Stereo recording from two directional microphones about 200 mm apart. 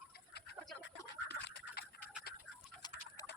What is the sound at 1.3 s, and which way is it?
Duck, 55° left (ahead or behind).